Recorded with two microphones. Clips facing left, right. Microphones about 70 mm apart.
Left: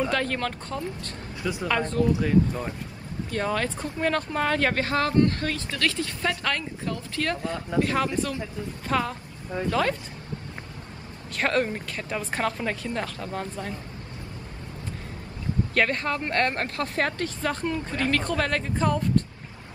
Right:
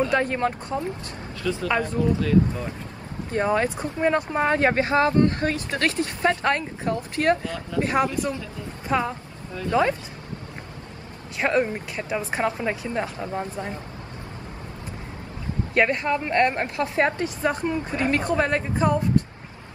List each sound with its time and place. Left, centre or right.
0.1 s speech: right
1.4 s speech: centre
1.7 s a woman's voice: centre
2.1 s speech: centre
3.3 s speech: right
7.4 s speech: left
7.8 s speech: right
11.3 s a woman's voice: centre
15.7 s speech: centre